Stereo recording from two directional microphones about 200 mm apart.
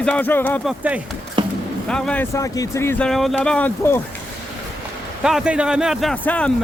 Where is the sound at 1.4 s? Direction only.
25° right (ahead or behind).